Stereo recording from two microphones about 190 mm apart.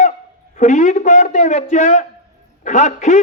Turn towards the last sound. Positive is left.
turn(degrees=40)  # may be behind; listen again after turning